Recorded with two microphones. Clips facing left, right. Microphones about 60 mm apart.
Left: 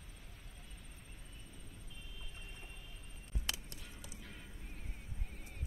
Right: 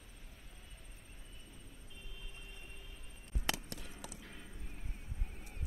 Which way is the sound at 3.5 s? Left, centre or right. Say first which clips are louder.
Right 6 dB; right.